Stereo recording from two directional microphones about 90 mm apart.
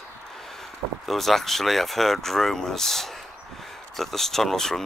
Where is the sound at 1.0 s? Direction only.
Centre (ahead or behind).